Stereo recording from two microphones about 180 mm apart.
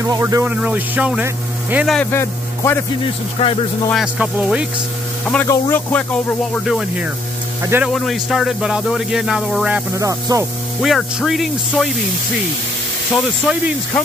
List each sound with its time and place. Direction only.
0.0 s speech: 20° right (ahead or behind)
1.9 s a man's voice: 10° left (ahead or behind)
3.4 s speech: 35° left (ahead or behind)
3.9 s speech: 5° right (ahead or behind)
5.2 s speech: 10° left (ahead or behind)
6.5 s speech: centre (ahead or behind)
7.9 s speech: centre (ahead or behind)
9.9 s speech: 15° right (ahead or behind)
10.8 s speech: centre (ahead or behind)
13.1 s speech: 5° right (ahead or behind)